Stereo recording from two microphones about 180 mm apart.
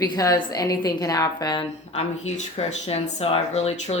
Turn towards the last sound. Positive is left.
turn(degrees=35)  # may be behind; listen again after turning